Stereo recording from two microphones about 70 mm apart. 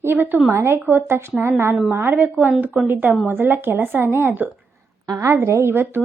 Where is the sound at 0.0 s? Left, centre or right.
Right.